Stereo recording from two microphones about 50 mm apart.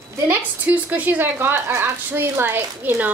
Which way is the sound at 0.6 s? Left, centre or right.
Right.